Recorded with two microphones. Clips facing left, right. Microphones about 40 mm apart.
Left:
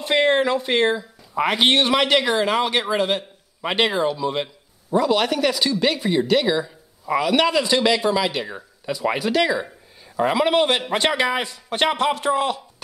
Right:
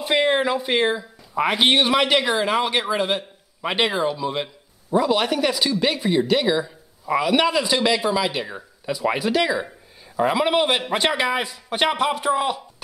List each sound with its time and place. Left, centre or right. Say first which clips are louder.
0.0 s speech: left 1 dB; centre